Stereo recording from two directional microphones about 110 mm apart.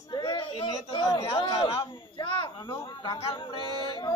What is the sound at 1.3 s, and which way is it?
Speech, 40° left (ahead or behind).